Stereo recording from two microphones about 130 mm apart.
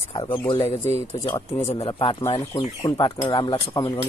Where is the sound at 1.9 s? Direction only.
45° left (ahead or behind).